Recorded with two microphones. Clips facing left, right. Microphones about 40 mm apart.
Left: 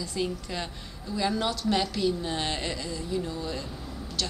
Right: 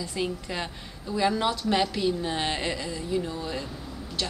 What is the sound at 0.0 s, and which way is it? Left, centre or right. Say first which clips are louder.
Speech: right 1 dB; centre.